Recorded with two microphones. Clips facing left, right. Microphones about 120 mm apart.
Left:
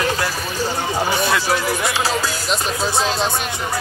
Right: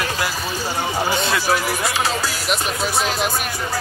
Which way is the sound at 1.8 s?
30° left (ahead or behind).